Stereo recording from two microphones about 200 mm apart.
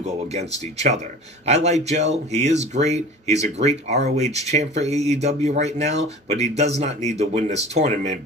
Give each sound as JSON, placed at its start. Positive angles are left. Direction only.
{"t": 0.0, "sound": "speech", "side_deg": -35}
{"t": 1.5, "sound": "speech", "side_deg": -35}